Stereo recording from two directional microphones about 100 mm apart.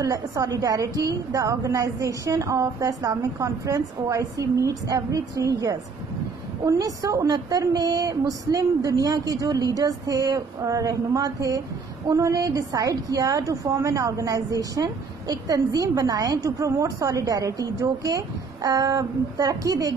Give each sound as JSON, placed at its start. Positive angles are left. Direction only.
{"t": 0.0, "sound": "a woman's voice", "side_deg": -35}